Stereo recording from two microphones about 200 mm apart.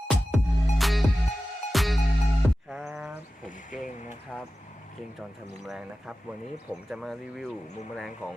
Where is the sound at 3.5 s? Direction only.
40° left (ahead or behind).